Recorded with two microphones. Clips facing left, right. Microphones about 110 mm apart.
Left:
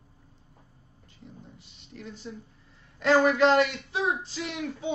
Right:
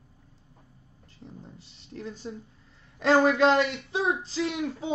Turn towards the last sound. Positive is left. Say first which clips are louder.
# right 2 dB
turn(degrees=-35)  # may be behind; listen again after turning